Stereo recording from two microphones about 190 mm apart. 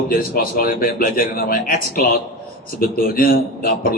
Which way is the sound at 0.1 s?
50° left (ahead or behind).